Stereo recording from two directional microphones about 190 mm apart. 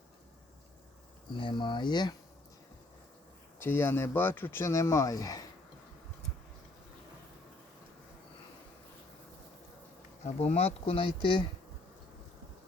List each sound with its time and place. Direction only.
1.3 s speech: 25° left (ahead or behind)
3.6 s speech: 10° left (ahead or behind)
10.2 s speech: 35° left (ahead or behind)